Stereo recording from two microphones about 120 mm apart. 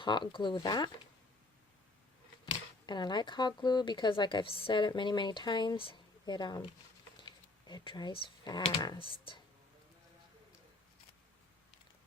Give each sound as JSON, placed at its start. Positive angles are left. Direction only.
{"t": 0.0, "sound": "speech", "side_deg": 40}
{"t": 2.5, "sound": "speech", "side_deg": 40}
{"t": 7.7, "sound": "speech", "side_deg": 40}